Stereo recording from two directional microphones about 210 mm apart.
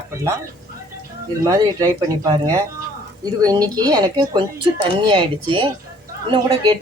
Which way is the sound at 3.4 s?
20° right (ahead or behind).